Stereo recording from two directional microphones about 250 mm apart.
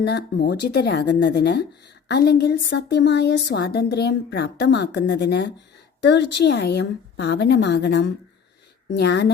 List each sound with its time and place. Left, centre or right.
0.0 s a woman's voice: left